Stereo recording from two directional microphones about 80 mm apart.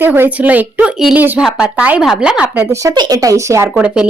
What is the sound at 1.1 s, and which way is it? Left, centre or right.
Speech, right.